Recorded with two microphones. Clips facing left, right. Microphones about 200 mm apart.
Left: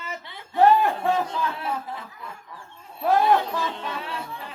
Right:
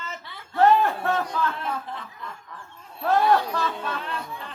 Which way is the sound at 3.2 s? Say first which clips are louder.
Even; 20° left (ahead or behind).